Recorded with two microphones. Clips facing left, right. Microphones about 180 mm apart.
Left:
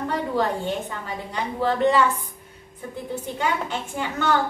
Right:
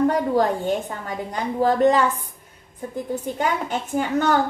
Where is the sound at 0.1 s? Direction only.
45° right (ahead or behind).